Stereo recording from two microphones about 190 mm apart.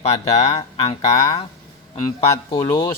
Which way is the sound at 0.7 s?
30° left (ahead or behind).